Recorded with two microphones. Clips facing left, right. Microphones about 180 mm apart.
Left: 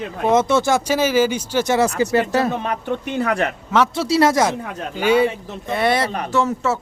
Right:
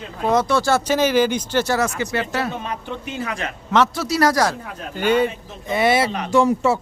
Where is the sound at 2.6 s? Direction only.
60° left (ahead or behind).